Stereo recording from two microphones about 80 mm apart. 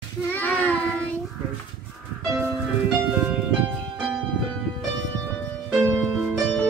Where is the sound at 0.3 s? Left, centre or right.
Left.